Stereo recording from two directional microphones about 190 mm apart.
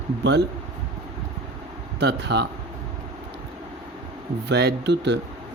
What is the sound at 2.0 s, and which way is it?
Speech, 60° right (ahead or behind).